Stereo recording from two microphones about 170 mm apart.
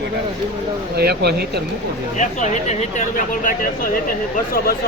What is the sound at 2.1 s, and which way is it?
Speech, 45° left (ahead or behind).